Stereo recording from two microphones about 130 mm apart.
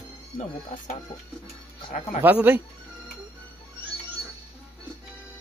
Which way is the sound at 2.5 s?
15° right (ahead or behind).